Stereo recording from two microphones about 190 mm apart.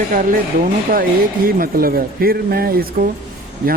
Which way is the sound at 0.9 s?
50° right (ahead or behind).